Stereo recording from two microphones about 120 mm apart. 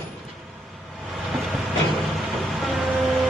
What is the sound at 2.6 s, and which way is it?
Vehicle, centre (ahead or behind).